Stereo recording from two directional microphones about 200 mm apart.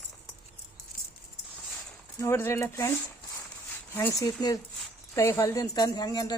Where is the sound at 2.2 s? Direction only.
10° left (ahead or behind).